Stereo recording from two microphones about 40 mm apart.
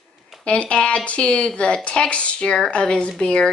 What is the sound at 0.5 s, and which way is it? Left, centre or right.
Speech, left.